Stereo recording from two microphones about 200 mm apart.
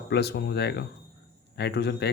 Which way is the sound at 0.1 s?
55° left (ahead or behind).